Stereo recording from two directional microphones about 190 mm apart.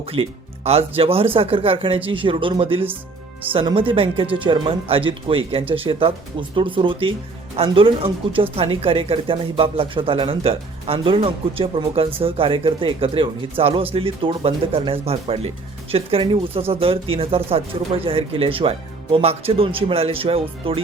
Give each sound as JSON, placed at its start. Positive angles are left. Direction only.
{"t": 0.0, "sound": "speech", "side_deg": -30}